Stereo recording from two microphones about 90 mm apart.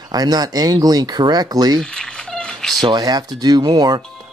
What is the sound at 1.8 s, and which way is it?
Cat, 10° left (ahead or behind).